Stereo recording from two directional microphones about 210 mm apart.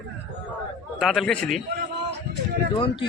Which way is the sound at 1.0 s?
Centre (ahead or behind).